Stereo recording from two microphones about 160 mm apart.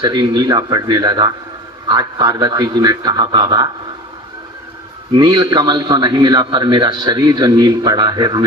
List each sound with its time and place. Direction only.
0.0 s a man's voice: 30° right (ahead or behind)
5.1 s a man's voice: 30° right (ahead or behind)